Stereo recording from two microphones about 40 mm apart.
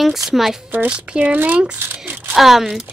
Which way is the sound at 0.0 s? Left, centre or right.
Centre.